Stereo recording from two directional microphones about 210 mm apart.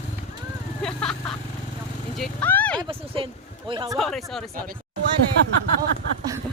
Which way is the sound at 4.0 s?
Centre (ahead or behind).